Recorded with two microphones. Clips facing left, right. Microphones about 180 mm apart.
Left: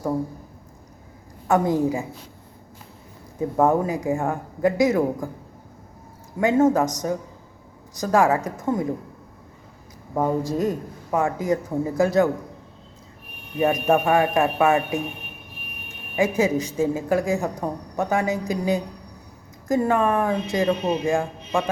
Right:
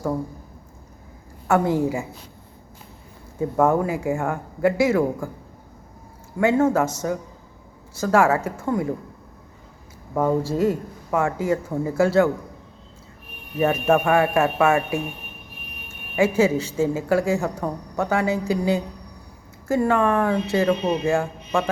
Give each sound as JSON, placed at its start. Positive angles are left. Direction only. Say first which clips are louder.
{"t": 1.5, "sound": "a woman's voice", "louder": "even", "side_deg": 15}
{"t": 3.6, "sound": "a man's voice", "louder": "even", "side_deg": 20}
{"t": 6.4, "sound": "a woman's voice", "louder": "even", "side_deg": 15}
{"t": 10.2, "sound": "a woman's voice", "louder": "right 2 dB", "side_deg": 15}
{"t": 13.6, "sound": "a woman's voice", "louder": "even", "side_deg": 15}
{"t": 16.1, "sound": "a woman's voice", "louder": "right 2 dB", "side_deg": 15}